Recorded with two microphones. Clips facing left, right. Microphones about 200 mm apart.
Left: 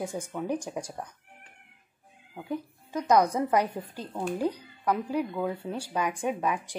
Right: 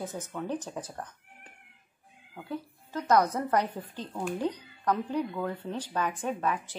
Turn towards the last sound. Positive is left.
turn(degrees=15)  # may be behind; listen again after turning